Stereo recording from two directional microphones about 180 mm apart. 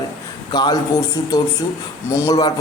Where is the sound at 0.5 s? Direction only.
25° left (ahead or behind).